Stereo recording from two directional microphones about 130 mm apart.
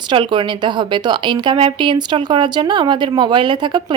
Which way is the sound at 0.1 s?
40° right (ahead or behind).